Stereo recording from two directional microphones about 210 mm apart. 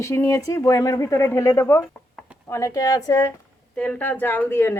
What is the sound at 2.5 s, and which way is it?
Speech, 15° left (ahead or behind).